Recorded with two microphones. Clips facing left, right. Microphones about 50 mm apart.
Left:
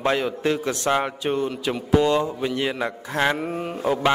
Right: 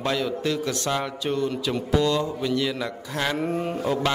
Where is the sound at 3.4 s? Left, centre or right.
Centre.